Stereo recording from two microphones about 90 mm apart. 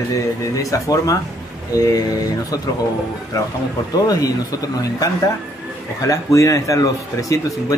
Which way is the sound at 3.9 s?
45° left (ahead or behind).